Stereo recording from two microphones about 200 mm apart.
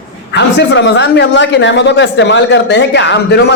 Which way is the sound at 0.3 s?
60° left (ahead or behind).